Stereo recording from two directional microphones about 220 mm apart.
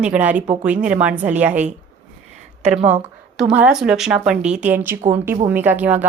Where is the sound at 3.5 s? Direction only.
5° right (ahead or behind).